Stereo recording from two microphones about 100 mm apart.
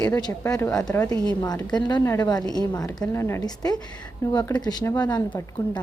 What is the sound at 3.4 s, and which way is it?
A woman's voice, 40° left (ahead or behind).